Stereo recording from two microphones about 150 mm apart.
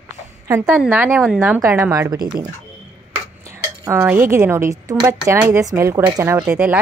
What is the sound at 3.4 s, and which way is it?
A woman's voice, 20° right (ahead or behind).